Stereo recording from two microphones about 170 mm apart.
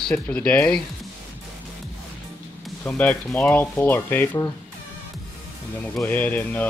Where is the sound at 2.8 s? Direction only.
10° left (ahead or behind).